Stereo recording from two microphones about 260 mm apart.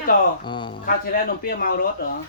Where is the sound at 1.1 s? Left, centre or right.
Left.